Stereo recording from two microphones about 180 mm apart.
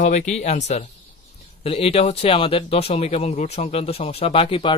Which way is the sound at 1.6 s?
35° left (ahead or behind).